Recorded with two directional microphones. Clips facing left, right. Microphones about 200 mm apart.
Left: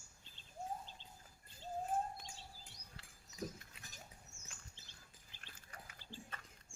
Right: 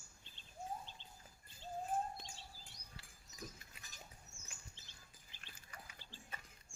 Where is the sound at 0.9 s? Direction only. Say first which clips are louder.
Even; 40° left (ahead or behind).